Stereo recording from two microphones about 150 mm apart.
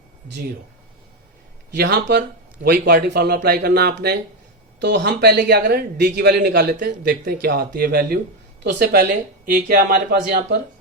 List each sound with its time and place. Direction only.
1.7 s speech: 90° right
8.8 s speech: 70° right (ahead or behind)